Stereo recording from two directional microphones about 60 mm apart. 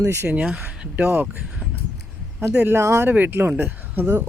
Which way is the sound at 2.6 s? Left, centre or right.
Right.